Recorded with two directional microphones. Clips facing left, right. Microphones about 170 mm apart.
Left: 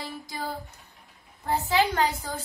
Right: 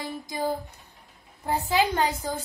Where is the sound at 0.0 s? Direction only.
20° right (ahead or behind).